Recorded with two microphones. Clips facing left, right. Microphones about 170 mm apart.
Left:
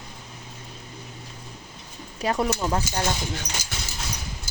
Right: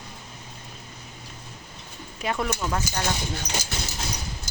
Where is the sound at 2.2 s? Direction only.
35° left (ahead or behind).